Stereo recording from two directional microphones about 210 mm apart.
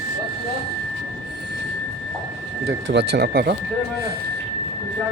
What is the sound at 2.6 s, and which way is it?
Speech, 55° right (ahead or behind).